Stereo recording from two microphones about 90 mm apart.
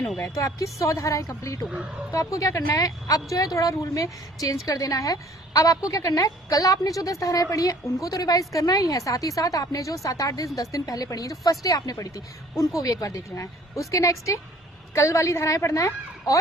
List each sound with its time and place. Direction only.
0.2 s a woman's voice: 35° left (ahead or behind)
1.7 s speech: 15° right (ahead or behind)
2.1 s a woman's voice: 35° left (ahead or behind)